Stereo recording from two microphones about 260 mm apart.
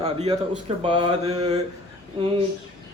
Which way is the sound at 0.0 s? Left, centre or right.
Right.